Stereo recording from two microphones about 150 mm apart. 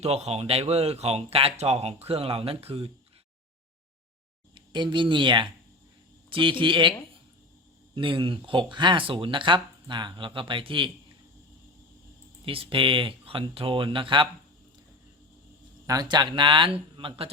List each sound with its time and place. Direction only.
0.0 s speech: 45° right (ahead or behind)
4.5 s speech: 30° right (ahead or behind)
7.9 s speech: 35° right (ahead or behind)
12.5 s speech: 35° right (ahead or behind)
15.9 s speech: 25° right (ahead or behind)